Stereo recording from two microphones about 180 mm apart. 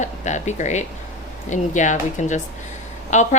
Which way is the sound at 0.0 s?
40° left (ahead or behind).